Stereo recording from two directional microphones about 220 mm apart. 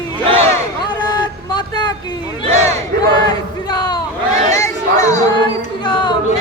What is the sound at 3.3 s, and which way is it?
Speech, 20° left (ahead or behind).